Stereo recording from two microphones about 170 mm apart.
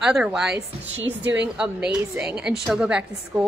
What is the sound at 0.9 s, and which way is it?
Speech, 90° right.